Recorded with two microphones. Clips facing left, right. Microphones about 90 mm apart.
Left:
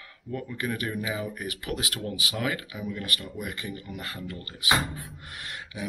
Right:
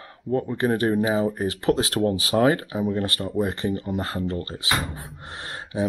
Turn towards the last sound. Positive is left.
turn(degrees=-35)  # may be behind; listen again after turning